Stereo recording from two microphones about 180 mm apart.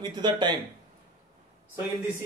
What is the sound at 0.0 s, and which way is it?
Speech, 25° right (ahead or behind).